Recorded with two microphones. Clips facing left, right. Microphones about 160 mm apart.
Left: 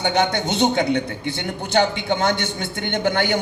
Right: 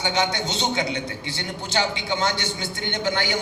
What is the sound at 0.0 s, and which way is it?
A man's voice, 55° left (ahead or behind).